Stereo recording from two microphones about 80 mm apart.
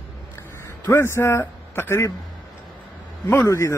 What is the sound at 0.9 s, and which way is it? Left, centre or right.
Speech, left.